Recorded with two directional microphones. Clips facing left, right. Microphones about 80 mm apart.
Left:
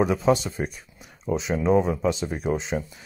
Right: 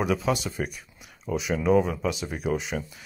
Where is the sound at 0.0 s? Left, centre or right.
Left.